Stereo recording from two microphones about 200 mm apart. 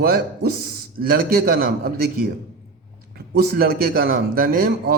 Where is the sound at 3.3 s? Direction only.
50° right (ahead or behind).